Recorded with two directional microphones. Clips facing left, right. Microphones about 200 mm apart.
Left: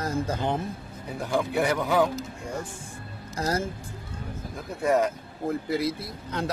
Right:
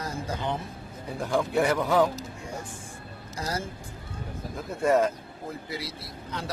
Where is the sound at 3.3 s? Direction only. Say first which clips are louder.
Left 5 dB; 45° left (ahead or behind).